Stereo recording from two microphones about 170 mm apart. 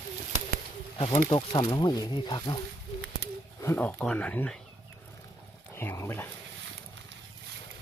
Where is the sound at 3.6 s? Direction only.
10° left (ahead or behind).